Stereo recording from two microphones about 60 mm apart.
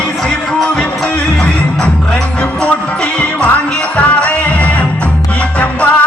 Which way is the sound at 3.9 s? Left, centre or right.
Left.